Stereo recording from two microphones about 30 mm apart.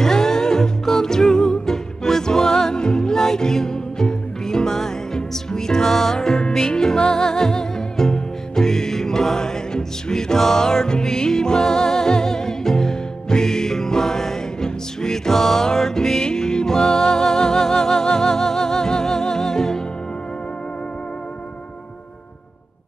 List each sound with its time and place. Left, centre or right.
0.0 s music: centre